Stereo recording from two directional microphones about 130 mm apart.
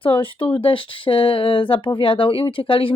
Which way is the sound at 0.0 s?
40° left (ahead or behind).